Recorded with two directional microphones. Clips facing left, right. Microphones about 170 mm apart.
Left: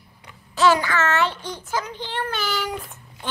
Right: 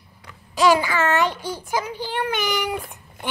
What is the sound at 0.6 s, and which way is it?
A child's voice, 10° right (ahead or behind).